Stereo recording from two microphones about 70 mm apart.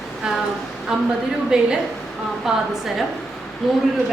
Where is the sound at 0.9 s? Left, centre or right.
Centre.